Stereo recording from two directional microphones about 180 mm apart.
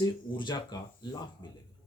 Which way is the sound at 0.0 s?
25° left (ahead or behind).